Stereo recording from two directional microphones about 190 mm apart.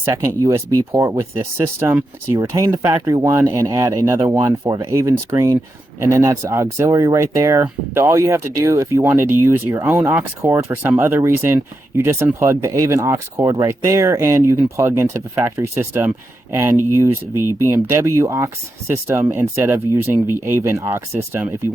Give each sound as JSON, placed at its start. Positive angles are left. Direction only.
{"t": 0.0, "sound": "speech", "side_deg": -15}